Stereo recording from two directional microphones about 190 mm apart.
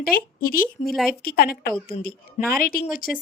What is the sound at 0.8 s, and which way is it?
Speech, 35° left (ahead or behind).